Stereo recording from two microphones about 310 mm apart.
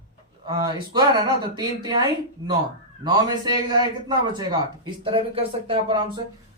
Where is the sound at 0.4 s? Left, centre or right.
Centre.